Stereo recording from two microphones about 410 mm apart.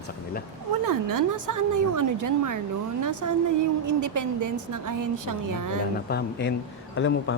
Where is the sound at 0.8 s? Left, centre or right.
Right.